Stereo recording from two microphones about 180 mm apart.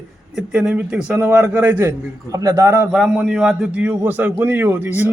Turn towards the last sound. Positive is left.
turn(degrees=-10)  # may be behind; listen again after turning